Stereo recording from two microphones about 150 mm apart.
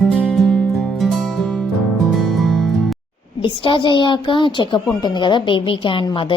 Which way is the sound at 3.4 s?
35° left (ahead or behind).